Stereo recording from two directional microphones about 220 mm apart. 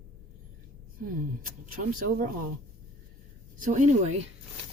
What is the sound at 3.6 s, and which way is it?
Speech, 35° right (ahead or behind).